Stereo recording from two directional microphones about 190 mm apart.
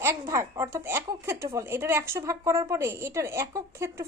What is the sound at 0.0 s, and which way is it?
A woman's voice, 15° right (ahead or behind).